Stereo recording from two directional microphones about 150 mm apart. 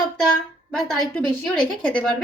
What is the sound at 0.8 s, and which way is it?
A woman's voice, centre (ahead or behind).